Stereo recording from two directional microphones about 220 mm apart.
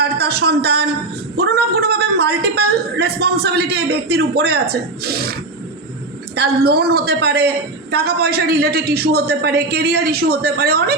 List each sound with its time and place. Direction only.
0.0 s a man's voice: 45° right (ahead or behind)